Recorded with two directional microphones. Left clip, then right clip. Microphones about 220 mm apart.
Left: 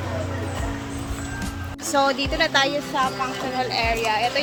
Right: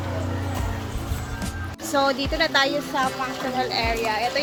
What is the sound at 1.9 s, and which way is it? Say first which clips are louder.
Speech: left 1 dB; 5° left (ahead or behind).